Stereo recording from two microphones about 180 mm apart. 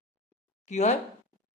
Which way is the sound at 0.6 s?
40° left (ahead or behind).